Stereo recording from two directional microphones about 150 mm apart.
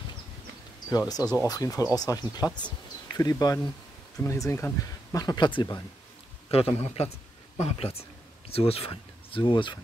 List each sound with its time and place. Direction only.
0.9 s speech: 25° left (ahead or behind)
6.5 s a man's voice: 40° left (ahead or behind)